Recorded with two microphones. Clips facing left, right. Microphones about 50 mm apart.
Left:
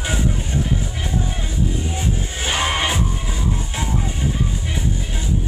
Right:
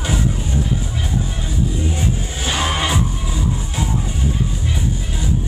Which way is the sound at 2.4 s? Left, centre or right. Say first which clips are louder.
Even; left.